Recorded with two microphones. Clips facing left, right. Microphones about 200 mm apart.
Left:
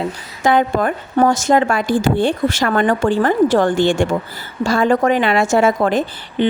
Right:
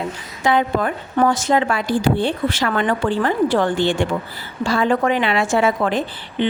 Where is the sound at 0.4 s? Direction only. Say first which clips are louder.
Left 3 dB; 45° left (ahead or behind).